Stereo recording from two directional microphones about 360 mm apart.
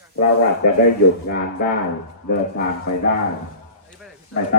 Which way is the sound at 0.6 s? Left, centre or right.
Left.